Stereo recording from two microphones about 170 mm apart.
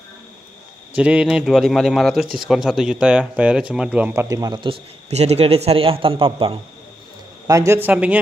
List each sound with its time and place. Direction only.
0.9 s speech: 5° right (ahead or behind); by 6.6 s 30° right (ahead or behind)
7.4 s speech: 20° right (ahead or behind)